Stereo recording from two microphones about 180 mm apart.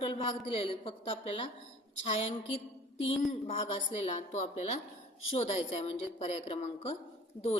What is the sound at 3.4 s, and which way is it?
A woman's voice, 35° left (ahead or behind).